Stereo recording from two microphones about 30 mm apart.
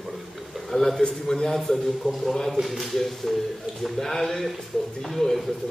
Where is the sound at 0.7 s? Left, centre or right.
Centre.